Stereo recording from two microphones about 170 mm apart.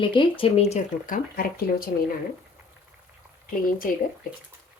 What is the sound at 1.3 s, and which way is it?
Speech, 60° left (ahead or behind).